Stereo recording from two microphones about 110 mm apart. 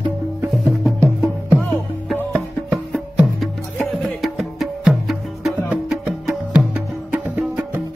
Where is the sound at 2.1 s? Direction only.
15° right (ahead or behind).